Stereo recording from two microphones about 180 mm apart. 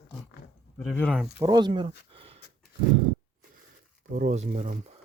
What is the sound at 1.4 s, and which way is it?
Speech, 25° right (ahead or behind).